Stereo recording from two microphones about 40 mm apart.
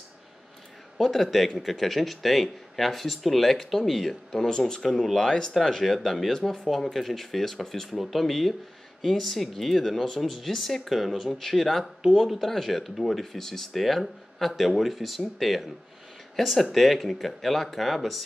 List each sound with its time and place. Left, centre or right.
0.9 s speech: centre
4.3 s speech: centre